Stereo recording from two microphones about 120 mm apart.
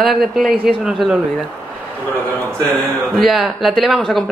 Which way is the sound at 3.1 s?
Centre (ahead or behind).